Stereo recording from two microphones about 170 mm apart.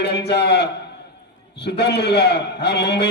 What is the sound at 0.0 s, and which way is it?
A man's voice, 80° left.